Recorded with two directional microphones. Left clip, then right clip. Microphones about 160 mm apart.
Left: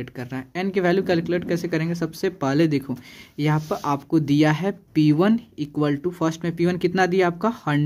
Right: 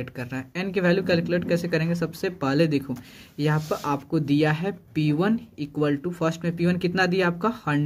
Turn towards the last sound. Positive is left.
turn(degrees=30)  # may be behind; listen again after turning